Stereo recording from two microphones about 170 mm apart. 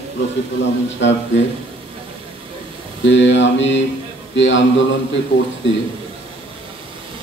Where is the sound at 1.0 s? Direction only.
90° left.